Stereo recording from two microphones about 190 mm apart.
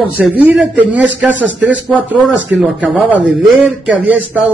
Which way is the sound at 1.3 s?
75° right (ahead or behind).